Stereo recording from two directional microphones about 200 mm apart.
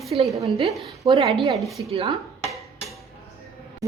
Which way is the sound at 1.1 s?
25° right (ahead or behind).